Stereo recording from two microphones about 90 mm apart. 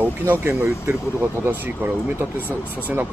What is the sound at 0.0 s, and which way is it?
Speech, 25° right (ahead or behind).